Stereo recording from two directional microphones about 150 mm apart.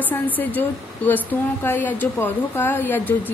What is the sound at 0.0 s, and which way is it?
A woman's voice, 10° left (ahead or behind).